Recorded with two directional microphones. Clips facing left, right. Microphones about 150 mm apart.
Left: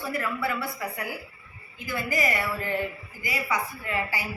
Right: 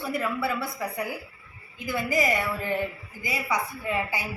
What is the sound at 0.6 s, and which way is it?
A woman's voice, 20° right (ahead or behind).